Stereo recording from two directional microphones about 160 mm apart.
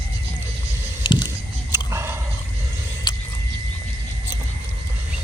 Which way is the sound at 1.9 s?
15° right (ahead or behind).